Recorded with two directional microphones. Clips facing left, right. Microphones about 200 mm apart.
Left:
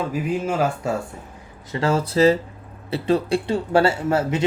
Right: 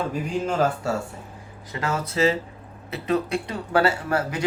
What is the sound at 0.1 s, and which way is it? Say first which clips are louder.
Speech: left 2 dB; 5° left (ahead or behind).